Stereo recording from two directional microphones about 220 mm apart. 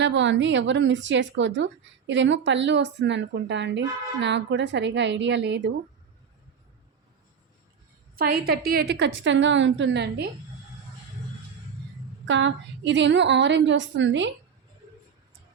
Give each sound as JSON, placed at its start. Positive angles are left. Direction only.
{"t": 0.0, "sound": "a woman's voice", "side_deg": -55}
{"t": 8.3, "sound": "a woman's voice", "side_deg": -45}
{"t": 12.3, "sound": "a woman's voice", "side_deg": -55}